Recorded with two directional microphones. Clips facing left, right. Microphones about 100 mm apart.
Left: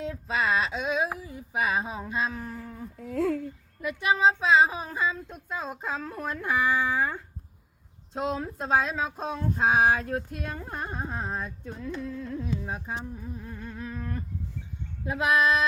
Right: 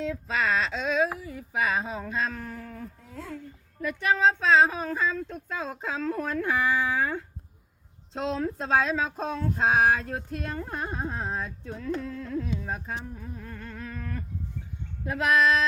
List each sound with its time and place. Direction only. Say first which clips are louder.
0.0 s speech: right 1 dB; 20° left (ahead or behind)
3.0 s a sound: left 13 dB; 90° left
3.8 s carnatic music: even; 15° left (ahead or behind)
9.6 s carnatic music: even; 15° left (ahead or behind)